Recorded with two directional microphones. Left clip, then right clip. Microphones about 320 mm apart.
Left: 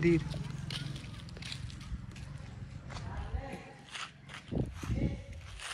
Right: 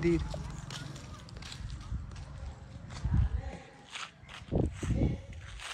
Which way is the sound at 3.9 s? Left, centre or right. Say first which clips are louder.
Right 1 dB; centre.